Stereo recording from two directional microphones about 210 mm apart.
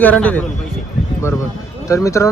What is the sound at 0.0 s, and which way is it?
Speech, 5° left (ahead or behind).